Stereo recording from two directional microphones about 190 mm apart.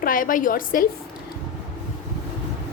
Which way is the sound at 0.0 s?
45° left (ahead or behind).